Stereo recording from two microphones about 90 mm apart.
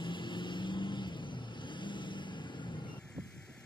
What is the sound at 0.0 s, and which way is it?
Vehicle, 60° left (ahead or behind).